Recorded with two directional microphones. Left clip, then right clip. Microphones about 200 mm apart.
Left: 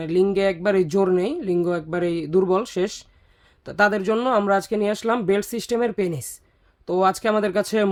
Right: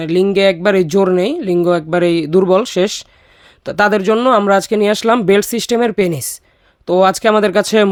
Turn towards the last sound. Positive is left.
turn(degrees=-35)  # may be behind; listen again after turning